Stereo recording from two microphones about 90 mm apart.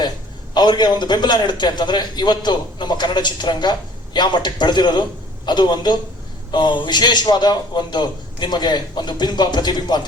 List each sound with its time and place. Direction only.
0.5 s a man's voice: 55° left (ahead or behind)